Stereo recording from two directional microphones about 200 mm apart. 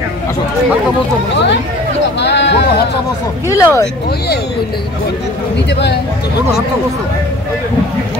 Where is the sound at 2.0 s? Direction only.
60° left (ahead or behind).